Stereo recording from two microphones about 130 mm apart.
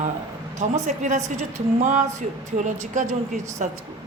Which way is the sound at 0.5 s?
65° right (ahead or behind).